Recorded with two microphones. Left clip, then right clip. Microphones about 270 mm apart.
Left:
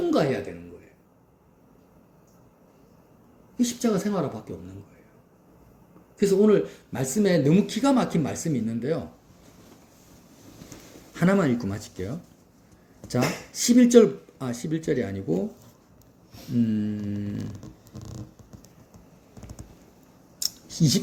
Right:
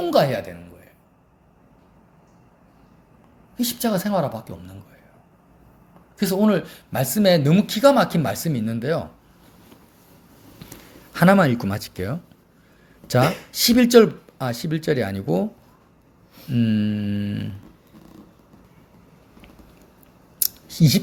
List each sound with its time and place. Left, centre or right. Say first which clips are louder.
0.1 s speech: right 5 dB; right
3.6 s speech: right 2 dB; right
6.1 s speech: left 1 dB; right
10.7 s speech: right 5 dB; right
16.6 s mantra: right 4 dB; right
20.4 s scissors: right 3 dB; right